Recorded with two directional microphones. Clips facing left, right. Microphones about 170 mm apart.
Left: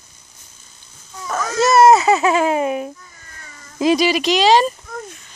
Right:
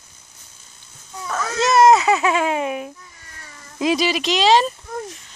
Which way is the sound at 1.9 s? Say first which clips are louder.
Left 3 dB; 40° left (ahead or behind).